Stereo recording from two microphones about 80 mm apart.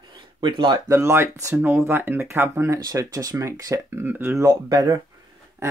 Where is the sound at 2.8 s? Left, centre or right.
Right.